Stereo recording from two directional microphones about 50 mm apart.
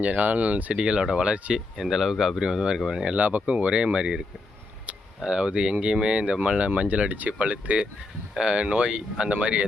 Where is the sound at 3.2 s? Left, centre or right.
Right.